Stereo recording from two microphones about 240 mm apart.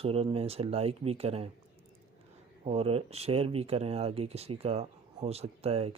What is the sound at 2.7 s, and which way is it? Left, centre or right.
Speech, right.